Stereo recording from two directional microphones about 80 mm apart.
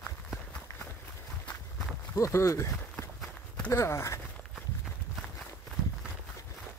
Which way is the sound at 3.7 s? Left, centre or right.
Left.